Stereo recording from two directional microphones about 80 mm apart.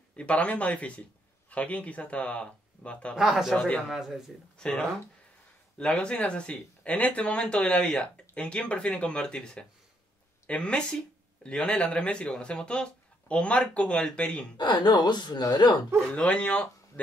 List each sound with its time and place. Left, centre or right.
0.1 s speech: centre
3.2 s speech: centre
3.5 s speech: centre
14.6 s a woman's voice: left
16.2 s speech: centre